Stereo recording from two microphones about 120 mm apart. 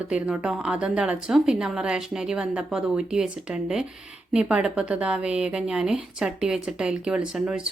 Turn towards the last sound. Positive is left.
turn(degrees=-5)  # may be behind; listen again after turning